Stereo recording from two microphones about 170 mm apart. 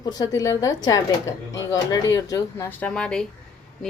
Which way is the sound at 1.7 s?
20° left (ahead or behind).